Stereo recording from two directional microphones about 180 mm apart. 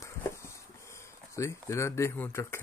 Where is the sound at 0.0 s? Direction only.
15° left (ahead or behind).